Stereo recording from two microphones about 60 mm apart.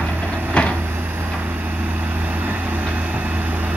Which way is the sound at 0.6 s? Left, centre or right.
Centre.